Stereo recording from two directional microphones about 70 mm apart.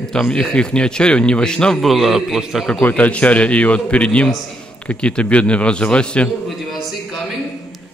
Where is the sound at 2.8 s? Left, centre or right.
Left.